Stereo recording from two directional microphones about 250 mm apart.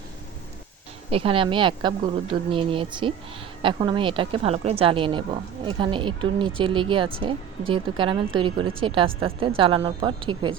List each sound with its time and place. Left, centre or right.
1.1 s speech: right